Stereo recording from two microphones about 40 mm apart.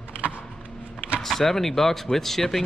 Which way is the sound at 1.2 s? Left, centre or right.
Centre.